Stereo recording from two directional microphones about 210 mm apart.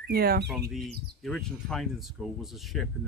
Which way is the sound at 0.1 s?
45° right (ahead or behind).